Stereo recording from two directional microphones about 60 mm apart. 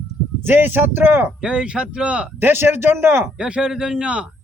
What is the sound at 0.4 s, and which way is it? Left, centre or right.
Speech, right.